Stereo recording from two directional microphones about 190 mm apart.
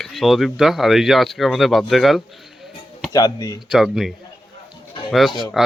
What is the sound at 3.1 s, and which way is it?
Speech, 20° left (ahead or behind).